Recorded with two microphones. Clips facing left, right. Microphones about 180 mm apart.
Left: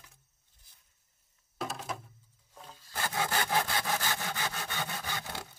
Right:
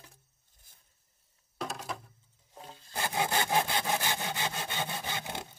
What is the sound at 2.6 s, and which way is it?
Roaring cats, 35° right (ahead or behind).